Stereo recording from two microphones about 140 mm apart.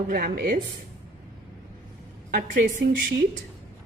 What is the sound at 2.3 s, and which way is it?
Speech, 80° right.